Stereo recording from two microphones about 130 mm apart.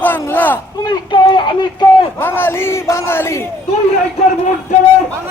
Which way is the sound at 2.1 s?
15° left (ahead or behind).